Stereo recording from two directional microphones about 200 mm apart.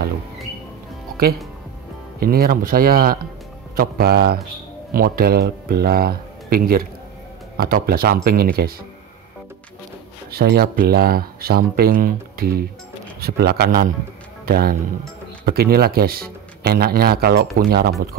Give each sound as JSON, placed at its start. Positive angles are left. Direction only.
{"t": 2.1, "sound": "speech", "side_deg": -50}
{"t": 10.3, "sound": "a man's voice", "side_deg": -50}